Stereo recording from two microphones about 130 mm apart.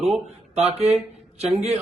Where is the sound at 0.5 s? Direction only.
55° right (ahead or behind).